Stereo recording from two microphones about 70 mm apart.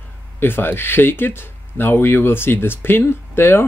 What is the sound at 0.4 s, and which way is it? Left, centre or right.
Speech, left.